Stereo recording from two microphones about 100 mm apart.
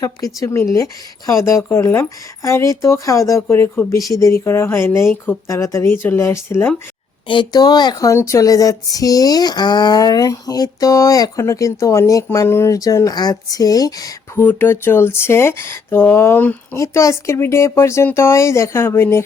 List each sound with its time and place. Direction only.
0.3 s speech: 30° left (ahead or behind)
5.5 s speech: 30° left (ahead or behind)
7.3 s speech: 50° left (ahead or behind)
14.3 s speech: 20° left (ahead or behind)
16.7 s speech: 30° left (ahead or behind)